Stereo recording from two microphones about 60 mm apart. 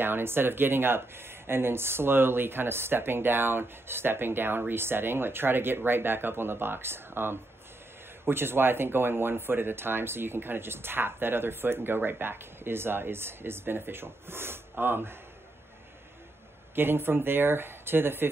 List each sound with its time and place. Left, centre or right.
0.0 s speech: right
16.7 s speech: right